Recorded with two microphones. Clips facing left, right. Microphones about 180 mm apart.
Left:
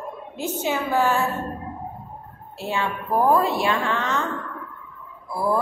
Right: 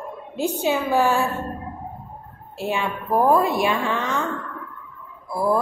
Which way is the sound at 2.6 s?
15° right (ahead or behind).